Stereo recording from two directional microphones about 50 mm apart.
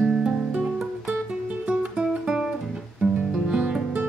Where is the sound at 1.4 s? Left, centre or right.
Right.